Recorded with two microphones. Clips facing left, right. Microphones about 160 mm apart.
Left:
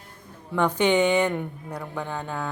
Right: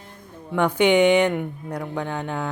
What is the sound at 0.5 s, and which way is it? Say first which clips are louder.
Speech: right 3 dB; 10° right (ahead or behind).